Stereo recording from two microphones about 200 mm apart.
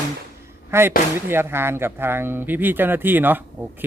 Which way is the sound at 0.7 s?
15° right (ahead or behind).